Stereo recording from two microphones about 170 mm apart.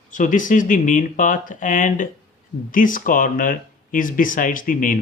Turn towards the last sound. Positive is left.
turn(degrees=50)  # may be behind; listen again after turning